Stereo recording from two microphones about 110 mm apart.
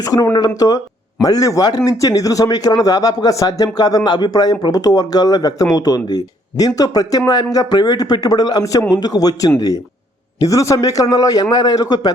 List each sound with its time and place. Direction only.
0.0 s speech: 35° left (ahead or behind)